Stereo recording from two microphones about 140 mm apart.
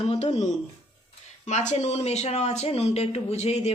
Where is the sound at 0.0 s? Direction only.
45° left (ahead or behind).